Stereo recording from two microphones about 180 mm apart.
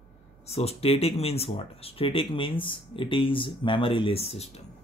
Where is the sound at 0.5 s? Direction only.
35° left (ahead or behind).